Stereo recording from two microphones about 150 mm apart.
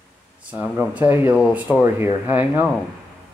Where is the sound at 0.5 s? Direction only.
10° right (ahead or behind).